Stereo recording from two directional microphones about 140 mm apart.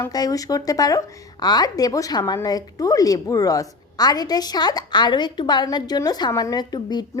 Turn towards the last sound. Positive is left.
turn(degrees=30)  # may be behind; listen again after turning